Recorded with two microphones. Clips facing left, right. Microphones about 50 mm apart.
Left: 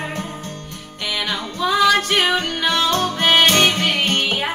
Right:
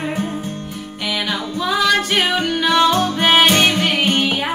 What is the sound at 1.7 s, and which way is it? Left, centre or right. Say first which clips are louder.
Music: left 1 dB; centre.